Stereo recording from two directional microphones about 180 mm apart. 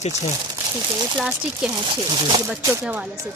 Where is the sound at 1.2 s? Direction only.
Centre (ahead or behind).